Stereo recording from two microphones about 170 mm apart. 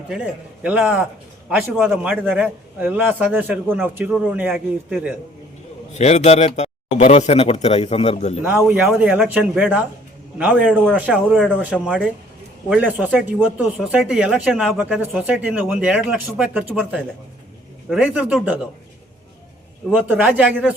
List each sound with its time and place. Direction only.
0.6 s a man's voice: 10° right (ahead or behind)
5.9 s speech: 40° left (ahead or behind)
8.4 s a man's voice: 10° right (ahead or behind)
19.9 s a man's voice: 10° right (ahead or behind)